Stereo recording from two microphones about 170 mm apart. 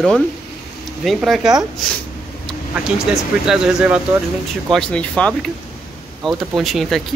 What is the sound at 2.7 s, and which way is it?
Speech, 5° right (ahead or behind).